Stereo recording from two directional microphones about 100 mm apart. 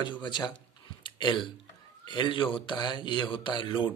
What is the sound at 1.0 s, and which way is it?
Hiccup, 50° left (ahead or behind).